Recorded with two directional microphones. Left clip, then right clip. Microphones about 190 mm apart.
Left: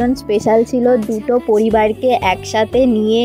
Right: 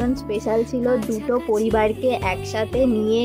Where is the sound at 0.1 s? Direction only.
25° left (ahead or behind).